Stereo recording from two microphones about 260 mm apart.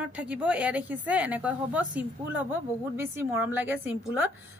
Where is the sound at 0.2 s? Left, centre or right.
Centre.